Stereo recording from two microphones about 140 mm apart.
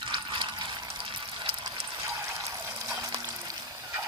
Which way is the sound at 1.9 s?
25° right (ahead or behind).